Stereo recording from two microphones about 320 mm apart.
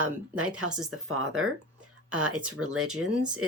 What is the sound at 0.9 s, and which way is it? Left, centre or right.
A woman's voice, right.